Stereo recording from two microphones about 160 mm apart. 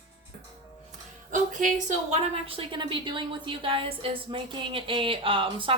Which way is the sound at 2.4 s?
35° right (ahead or behind).